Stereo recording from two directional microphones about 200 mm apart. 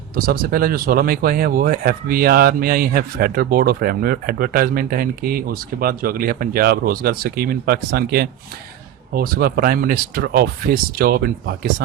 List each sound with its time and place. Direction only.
0.2 s speech: 45° right (ahead or behind)